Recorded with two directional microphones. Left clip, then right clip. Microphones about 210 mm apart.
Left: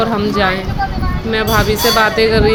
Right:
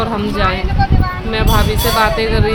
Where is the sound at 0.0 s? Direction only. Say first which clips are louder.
Left 2 dB; 5° left (ahead or behind).